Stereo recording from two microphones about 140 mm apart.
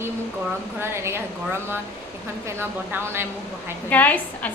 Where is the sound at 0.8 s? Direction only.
20° right (ahead or behind).